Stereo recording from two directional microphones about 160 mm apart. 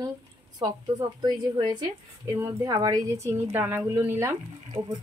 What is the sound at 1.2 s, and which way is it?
Speech, 25° right (ahead or behind).